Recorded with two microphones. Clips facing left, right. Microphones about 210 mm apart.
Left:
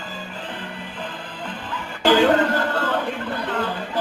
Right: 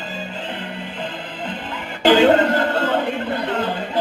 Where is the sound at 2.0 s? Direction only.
25° right (ahead or behind).